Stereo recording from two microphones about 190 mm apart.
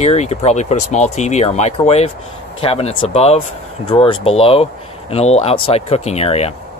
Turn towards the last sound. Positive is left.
turn(degrees=35)  # may be behind; listen again after turning